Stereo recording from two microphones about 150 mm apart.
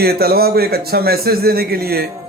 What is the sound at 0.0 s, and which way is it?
A man's voice, 90° right.